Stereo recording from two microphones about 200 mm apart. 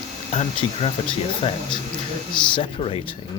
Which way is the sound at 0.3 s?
30° left (ahead or behind).